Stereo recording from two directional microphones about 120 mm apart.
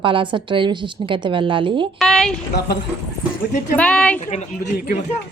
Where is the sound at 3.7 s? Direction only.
10° left (ahead or behind).